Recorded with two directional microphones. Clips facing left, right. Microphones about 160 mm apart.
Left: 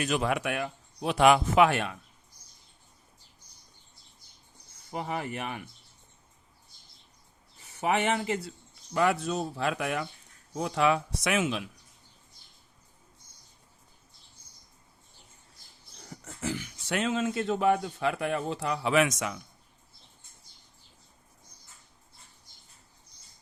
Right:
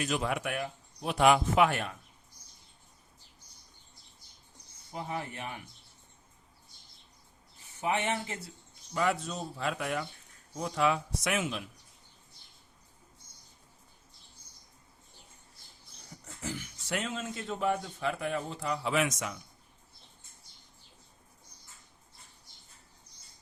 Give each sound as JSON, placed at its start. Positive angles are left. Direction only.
{"t": 0.0, "sound": "speech", "side_deg": 70}
{"t": 4.9, "sound": "speech", "side_deg": 85}
{"t": 7.8, "sound": "a man's voice", "side_deg": 85}
{"t": 16.2, "sound": "a man's voice", "side_deg": 90}